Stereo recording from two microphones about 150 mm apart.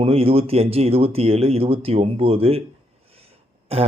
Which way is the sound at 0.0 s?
40° right (ahead or behind).